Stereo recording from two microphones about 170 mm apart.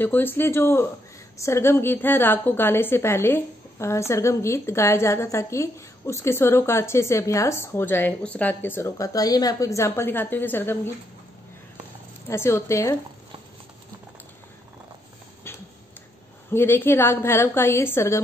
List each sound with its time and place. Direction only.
0.0 s a woman's voice: 10° left (ahead or behind)
12.3 s a woman's voice: 15° left (ahead or behind)
16.4 s a woman's voice: 15° left (ahead or behind)